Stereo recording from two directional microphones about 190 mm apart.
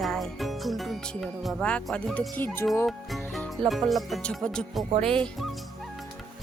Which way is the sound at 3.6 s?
Centre (ahead or behind).